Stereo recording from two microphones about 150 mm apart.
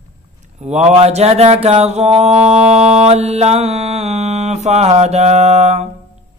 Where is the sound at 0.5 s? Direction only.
45° right (ahead or behind).